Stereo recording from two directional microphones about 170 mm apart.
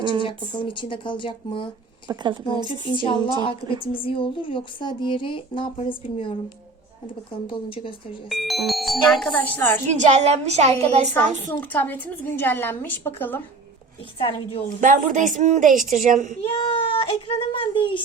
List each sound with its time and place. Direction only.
0.2 s speech: 30° left (ahead or behind)
2.0 s speech: 25° right (ahead or behind)
2.8 s speech: 30° left (ahead or behind)
3.3 s speech: 25° right (ahead or behind)
3.9 s speech: 30° left (ahead or behind)
7.4 s a child's voice: 30° left (ahead or behind)
8.3 s speech: centre (ahead or behind)
9.9 s a woman's voice: 45° right (ahead or behind)
11.1 s a woman's voice: 10° left (ahead or behind)
14.2 s a child's voice: 30° left (ahead or behind)
14.8 s a woman's voice: 50° right (ahead or behind)
16.4 s a child's voice: 30° left (ahead or behind)